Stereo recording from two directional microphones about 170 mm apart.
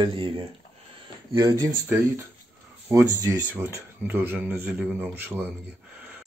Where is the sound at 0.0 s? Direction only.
30° right (ahead or behind); by 6.2 s 10° right (ahead or behind).